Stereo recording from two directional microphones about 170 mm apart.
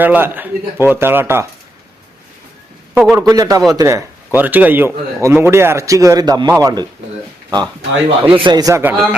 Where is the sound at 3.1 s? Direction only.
20° right (ahead or behind).